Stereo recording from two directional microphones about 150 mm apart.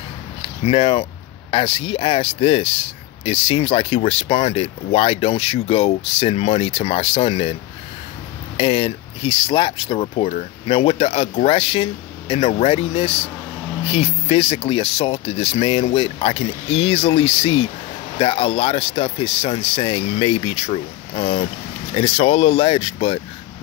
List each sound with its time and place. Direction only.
0.7 s speech: 35° left (ahead or behind)
8.5 s speech: 40° left (ahead or behind)